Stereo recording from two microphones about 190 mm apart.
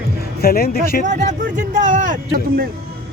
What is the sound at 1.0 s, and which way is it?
Speech, 40° right (ahead or behind).